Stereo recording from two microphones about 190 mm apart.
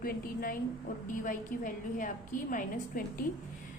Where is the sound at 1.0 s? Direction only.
45° left (ahead or behind).